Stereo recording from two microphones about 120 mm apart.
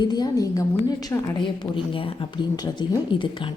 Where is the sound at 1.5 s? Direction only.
45° left (ahead or behind).